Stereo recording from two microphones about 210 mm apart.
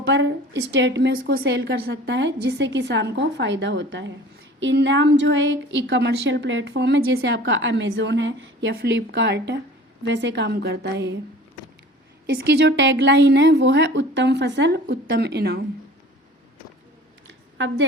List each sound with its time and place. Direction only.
0.0 s a woman's voice: 55° right (ahead or behind)
12.2 s a woman's voice: 50° right (ahead or behind)
17.2 s a sound: 60° right (ahead or behind)